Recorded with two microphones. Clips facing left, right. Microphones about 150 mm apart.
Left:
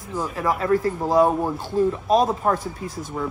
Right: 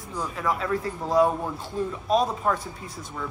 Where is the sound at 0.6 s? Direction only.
35° left (ahead or behind).